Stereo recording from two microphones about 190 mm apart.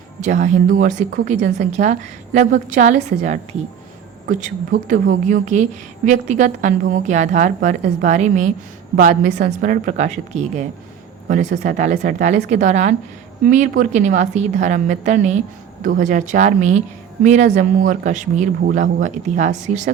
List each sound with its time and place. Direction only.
0.2 s a woman's voice: 40° right (ahead or behind)